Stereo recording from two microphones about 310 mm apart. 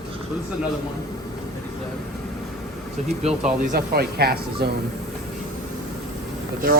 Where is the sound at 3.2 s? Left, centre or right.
Right.